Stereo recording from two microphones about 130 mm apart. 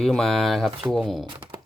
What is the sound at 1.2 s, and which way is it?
Speech, 40° right (ahead or behind).